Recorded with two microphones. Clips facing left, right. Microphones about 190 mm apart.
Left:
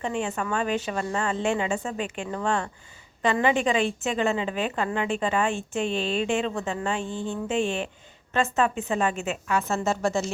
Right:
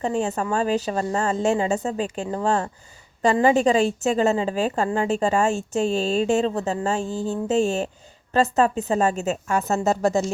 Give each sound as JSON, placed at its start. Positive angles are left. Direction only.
{"t": 0.0, "sound": "speech", "side_deg": -40}